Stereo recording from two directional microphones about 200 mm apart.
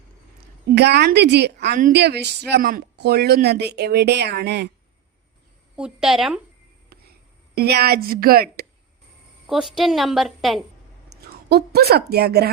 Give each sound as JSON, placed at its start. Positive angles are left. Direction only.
{"t": 0.7, "sound": "speech", "side_deg": -55}
{"t": 2.5, "sound": "speech", "side_deg": -45}
{"t": 5.7, "sound": "a woman's voice", "side_deg": -5}
{"t": 6.9, "sound": "a sound", "side_deg": -50}
{"t": 7.5, "sound": "a woman's voice", "side_deg": -50}
{"t": 9.5, "sound": "a woman's voice", "side_deg": 0}
{"t": 11.1, "sound": "a woman's voice", "side_deg": -55}